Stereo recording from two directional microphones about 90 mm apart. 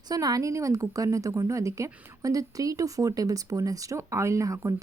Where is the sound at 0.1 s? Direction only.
45° right (ahead or behind).